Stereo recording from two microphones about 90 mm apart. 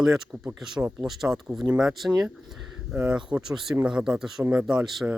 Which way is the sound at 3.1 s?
10° right (ahead or behind).